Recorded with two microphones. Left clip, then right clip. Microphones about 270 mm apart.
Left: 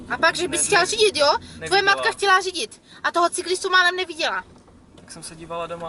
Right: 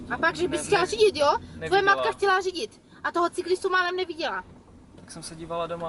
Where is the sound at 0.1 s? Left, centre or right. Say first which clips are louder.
Left 5 dB; centre.